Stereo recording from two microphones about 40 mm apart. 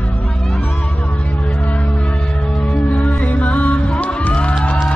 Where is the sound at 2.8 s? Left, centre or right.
Left.